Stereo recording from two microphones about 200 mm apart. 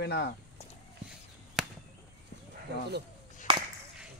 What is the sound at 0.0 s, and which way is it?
Speech, 55° left (ahead or behind).